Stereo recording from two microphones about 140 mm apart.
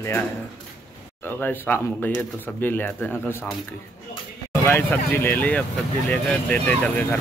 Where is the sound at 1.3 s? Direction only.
15° left (ahead or behind).